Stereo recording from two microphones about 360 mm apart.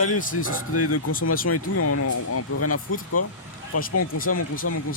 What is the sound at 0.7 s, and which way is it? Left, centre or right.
Speech, left.